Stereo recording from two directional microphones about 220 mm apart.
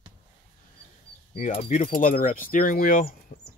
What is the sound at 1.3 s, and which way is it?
Speech, 35° left (ahead or behind).